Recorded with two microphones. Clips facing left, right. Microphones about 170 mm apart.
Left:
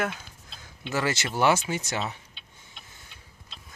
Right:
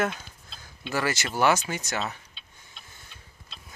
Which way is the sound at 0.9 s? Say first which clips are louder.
Even; 20° left (ahead or behind).